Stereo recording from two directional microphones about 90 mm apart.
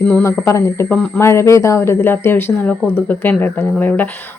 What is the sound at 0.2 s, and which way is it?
Speech, 30° left (ahead or behind).